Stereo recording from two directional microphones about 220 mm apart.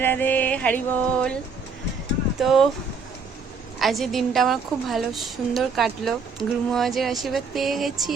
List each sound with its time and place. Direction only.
0.0 s music: 10° left (ahead or behind)
2.4 s a woman's voice: centre (ahead or behind)
3.8 s a woman's voice: centre (ahead or behind)